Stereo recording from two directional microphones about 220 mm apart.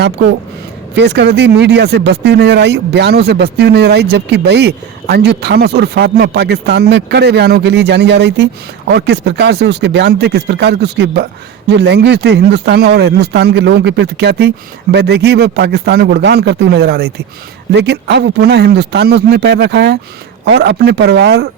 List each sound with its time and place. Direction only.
0.9 s speech: 50° right (ahead or behind)